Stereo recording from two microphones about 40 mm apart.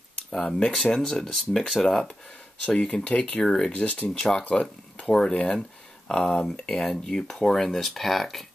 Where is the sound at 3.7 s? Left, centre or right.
Left.